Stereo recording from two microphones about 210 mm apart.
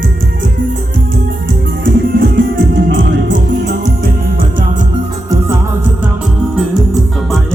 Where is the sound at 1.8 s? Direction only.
60° right (ahead or behind).